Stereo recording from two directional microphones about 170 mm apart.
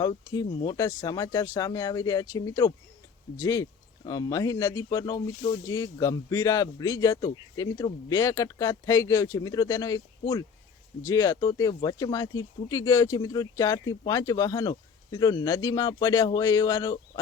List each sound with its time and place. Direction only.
0.0 s speech: 25° left (ahead or behind)